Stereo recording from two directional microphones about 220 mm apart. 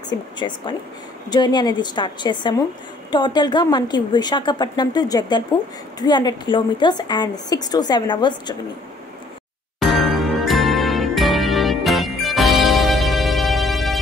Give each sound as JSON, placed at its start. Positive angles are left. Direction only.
{"t": 0.4, "sound": "a woman's voice", "side_deg": 20}
{"t": 9.8, "sound": "music", "side_deg": 0}